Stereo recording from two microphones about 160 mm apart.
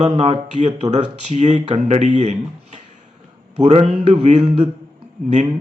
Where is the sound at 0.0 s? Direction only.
45° right (ahead or behind).